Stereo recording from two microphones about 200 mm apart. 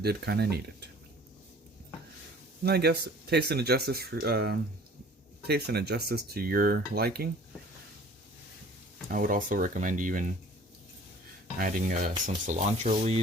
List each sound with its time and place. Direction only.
0.0 s speech: 50° right (ahead or behind)
2.6 s speech: 55° right (ahead or behind)
9.0 s speech: 45° right (ahead or behind)
11.5 s speech: 45° right (ahead or behind)